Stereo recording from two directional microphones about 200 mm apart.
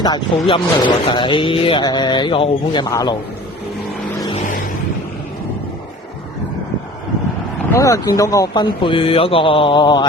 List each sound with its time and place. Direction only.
0.0 s speech: 20° left (ahead or behind)
7.7 s speech: 15° left (ahead or behind)